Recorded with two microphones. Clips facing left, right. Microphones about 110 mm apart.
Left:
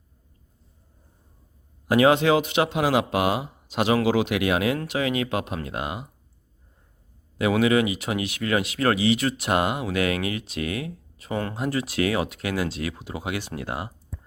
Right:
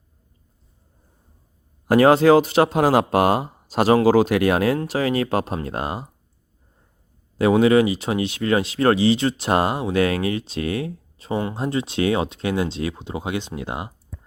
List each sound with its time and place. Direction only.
1.9 s speech: 40° right (ahead or behind)
7.3 s speech: 35° right (ahead or behind)